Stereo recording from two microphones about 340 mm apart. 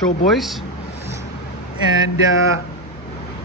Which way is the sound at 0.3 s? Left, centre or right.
Centre.